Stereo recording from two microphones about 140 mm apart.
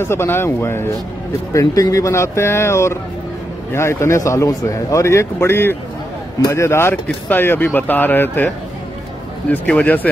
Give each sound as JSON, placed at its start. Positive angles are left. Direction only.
{"t": 0.0, "sound": "a man's voice", "side_deg": 15}
{"t": 9.5, "sound": "speech", "side_deg": 10}